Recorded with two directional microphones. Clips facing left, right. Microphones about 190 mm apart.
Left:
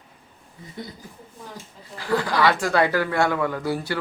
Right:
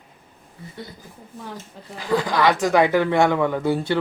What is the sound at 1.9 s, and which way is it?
Speech, 15° right (ahead or behind).